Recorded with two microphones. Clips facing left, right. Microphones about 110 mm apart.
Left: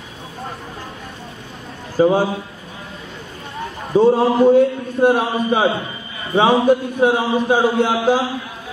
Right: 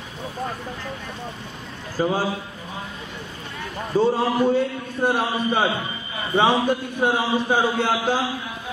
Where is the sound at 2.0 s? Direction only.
20° left (ahead or behind).